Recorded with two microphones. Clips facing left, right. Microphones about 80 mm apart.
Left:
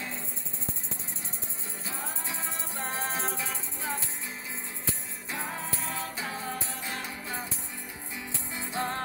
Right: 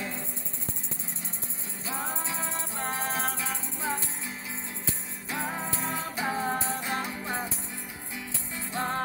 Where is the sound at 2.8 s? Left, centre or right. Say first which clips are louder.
Right 1 dB; centre.